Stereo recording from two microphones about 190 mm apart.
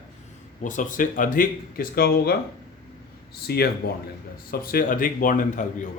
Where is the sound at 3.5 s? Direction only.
55° left (ahead or behind).